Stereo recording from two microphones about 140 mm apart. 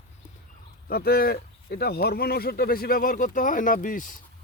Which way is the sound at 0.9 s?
90° left.